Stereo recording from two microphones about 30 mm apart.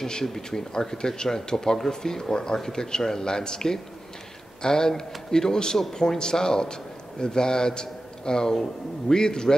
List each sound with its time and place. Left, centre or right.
0.2 s speech: centre